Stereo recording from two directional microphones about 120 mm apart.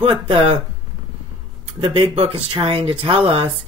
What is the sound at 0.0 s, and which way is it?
Speech, 50° right (ahead or behind).